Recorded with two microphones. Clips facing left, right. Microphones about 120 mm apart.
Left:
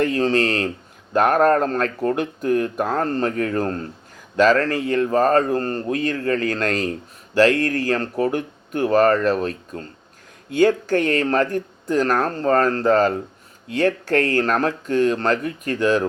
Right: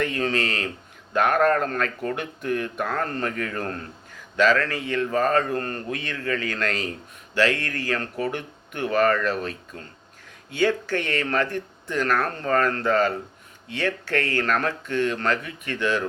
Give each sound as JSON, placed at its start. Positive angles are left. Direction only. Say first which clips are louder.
{"t": 0.0, "sound": "speech", "louder": "left 6 dB", "side_deg": 35}